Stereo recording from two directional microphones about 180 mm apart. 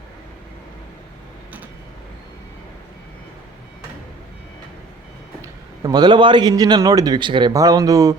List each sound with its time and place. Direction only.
5.4 s a man's voice: 20° right (ahead or behind)